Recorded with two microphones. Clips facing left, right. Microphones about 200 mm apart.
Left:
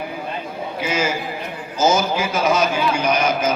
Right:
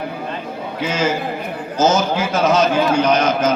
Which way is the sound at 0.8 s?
10° left (ahead or behind).